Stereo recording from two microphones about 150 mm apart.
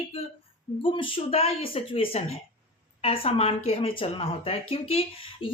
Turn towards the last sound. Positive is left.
turn(degrees=40)  # may be behind; listen again after turning